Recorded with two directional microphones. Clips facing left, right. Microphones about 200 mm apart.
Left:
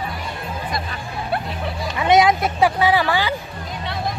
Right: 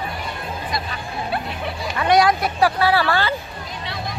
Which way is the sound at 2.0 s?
20° left (ahead or behind).